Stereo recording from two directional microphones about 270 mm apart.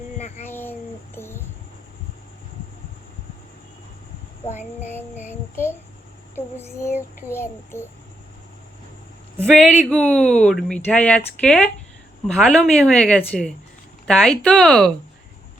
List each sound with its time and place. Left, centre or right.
0.2 s a sound: left
0.5 s child singing: centre
5.3 s a child's voice: centre
9.5 s speech: centre